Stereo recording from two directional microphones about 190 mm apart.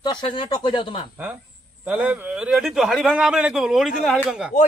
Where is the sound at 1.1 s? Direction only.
10° right (ahead or behind).